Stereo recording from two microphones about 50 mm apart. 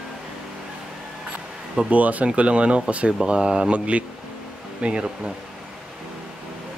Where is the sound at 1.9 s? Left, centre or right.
Right; by 3.7 s centre.